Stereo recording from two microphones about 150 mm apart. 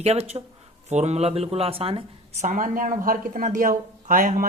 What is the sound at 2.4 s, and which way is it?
Speech, 65° right (ahead or behind).